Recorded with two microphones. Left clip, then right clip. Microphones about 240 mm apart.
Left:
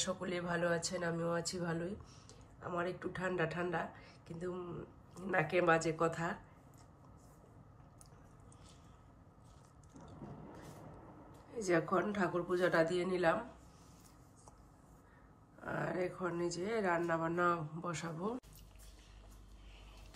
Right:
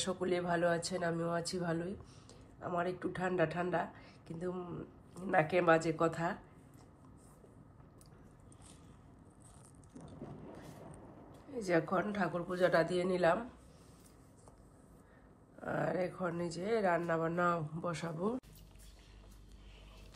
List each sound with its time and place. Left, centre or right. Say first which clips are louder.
0.0 s a woman's voice: right 4 dB; centre
11.6 s a woman's voice: even; centre
15.6 s a woman's voice: right 3 dB; centre